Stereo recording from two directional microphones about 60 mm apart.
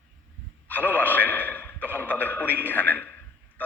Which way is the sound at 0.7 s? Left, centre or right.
Left.